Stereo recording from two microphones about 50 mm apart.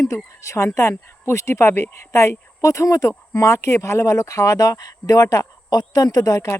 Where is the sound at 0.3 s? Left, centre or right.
Left.